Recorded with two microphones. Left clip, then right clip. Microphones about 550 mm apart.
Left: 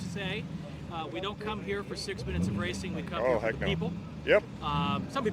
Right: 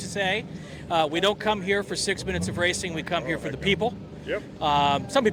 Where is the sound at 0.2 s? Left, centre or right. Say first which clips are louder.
Right 11 dB; right.